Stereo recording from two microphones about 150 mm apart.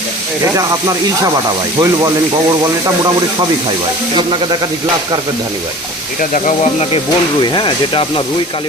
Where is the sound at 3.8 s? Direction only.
30° right (ahead or behind).